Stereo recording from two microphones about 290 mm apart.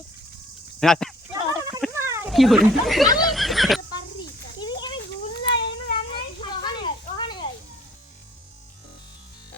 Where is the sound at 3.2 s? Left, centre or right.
Centre.